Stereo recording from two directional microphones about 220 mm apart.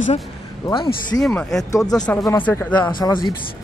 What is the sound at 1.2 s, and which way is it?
Speech, 5° left (ahead or behind).